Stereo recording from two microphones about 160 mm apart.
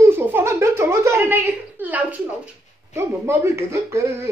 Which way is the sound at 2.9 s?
15° right (ahead or behind).